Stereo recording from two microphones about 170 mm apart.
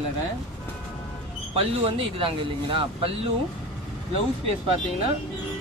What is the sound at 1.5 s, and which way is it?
Speech, 30° right (ahead or behind).